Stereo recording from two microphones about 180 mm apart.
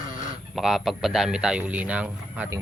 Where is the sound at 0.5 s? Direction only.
Centre (ahead or behind).